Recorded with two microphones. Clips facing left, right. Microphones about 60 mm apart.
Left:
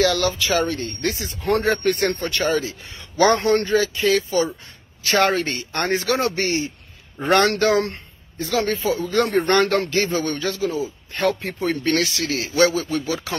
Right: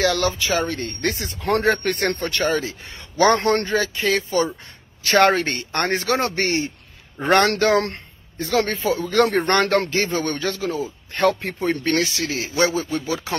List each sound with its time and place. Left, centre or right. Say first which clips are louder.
0.0 s speech: left 1 dB; right
0.7 s a man's voice: even; right
1.4 s a man's voice: even; right
3.6 s a man's voice: left 2 dB; right
11.6 s a man's voice: even; right